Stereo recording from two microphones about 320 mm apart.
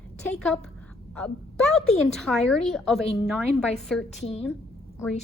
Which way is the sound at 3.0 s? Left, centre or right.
Centre.